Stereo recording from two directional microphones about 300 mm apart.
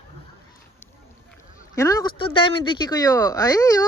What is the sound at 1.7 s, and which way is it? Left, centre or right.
Speech, centre.